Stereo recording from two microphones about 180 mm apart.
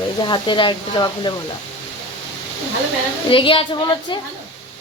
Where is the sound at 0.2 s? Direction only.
25° left (ahead or behind).